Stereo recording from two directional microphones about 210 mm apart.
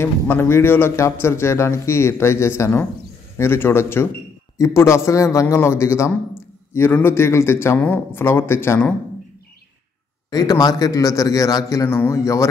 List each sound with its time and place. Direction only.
0.0 s a man's voice: 10° left (ahead or behind)
10.3 s a man's voice: 15° left (ahead or behind)